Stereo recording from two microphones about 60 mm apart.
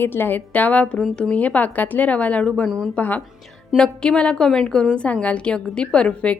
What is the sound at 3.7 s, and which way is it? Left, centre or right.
A woman's voice, centre.